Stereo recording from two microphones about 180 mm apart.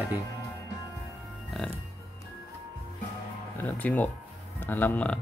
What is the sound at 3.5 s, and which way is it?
Speech, 10° left (ahead or behind).